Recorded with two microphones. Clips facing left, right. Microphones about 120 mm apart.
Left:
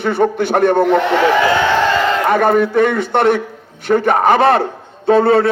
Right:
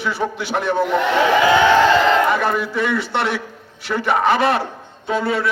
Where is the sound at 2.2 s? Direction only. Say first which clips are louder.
Left 6 dB; 50° left (ahead or behind).